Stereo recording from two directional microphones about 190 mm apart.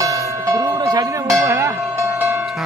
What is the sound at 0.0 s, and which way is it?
Music, 15° right (ahead or behind).